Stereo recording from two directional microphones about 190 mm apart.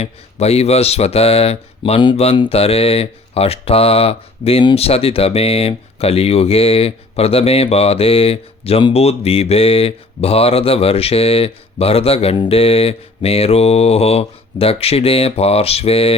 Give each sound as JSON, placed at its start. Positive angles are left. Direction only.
{"t": 0.0, "sound": "speech", "side_deg": 35}